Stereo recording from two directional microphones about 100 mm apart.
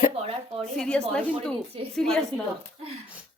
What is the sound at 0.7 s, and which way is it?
A woman's voice, 10° left (ahead or behind).